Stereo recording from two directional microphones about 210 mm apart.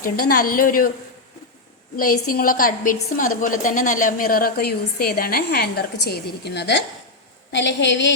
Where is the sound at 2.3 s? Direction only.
40° left (ahead or behind).